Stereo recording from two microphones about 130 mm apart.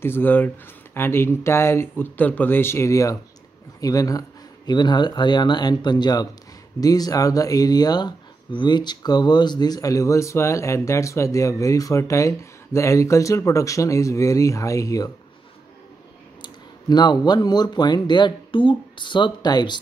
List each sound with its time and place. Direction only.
0.0 s speech: 15° left (ahead or behind)
16.9 s speech: 35° left (ahead or behind)